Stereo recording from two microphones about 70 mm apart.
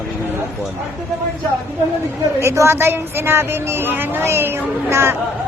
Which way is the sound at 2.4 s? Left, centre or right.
Right.